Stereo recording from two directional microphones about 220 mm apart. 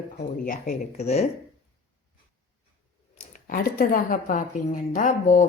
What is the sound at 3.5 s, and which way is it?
A woman's voice, 40° left (ahead or behind).